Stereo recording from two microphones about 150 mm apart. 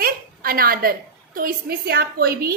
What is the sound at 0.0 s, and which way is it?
A woman's voice, 75° right (ahead or behind).